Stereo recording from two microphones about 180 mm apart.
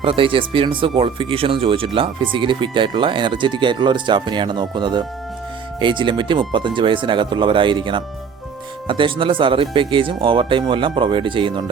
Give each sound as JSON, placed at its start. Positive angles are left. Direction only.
{"t": 0.0, "sound": "speech", "side_deg": -30}